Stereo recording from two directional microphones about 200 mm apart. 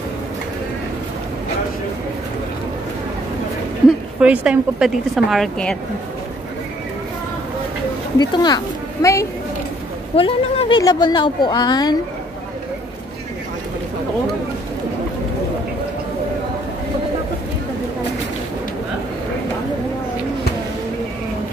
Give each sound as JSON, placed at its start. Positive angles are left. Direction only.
{"t": 4.2, "sound": "a woman's voice", "side_deg": -5}
{"t": 8.2, "sound": "speech", "side_deg": 20}
{"t": 10.1, "sound": "a woman's voice", "side_deg": 30}